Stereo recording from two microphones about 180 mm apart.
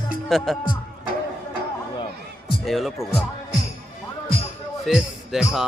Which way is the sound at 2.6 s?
Centre (ahead or behind).